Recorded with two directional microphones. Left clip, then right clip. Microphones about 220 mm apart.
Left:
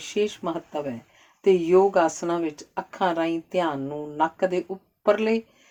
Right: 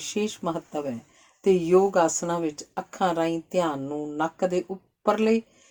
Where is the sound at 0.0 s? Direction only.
45° right (ahead or behind).